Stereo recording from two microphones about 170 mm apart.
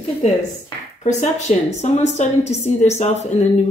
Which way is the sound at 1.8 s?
40° left (ahead or behind).